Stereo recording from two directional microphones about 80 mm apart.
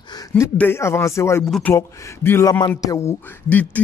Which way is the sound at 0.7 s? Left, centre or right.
Left.